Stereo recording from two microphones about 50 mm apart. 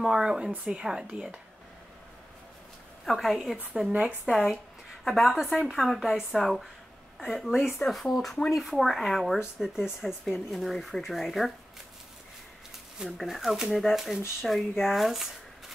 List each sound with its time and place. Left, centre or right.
0.0 s speech: centre
3.1 s speech: centre
13.0 s speech: centre